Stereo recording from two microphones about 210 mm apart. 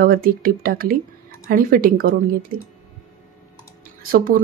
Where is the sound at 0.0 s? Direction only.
45° right (ahead or behind).